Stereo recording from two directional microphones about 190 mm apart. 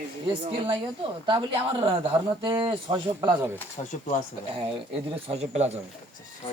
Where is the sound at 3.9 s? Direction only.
40° left (ahead or behind).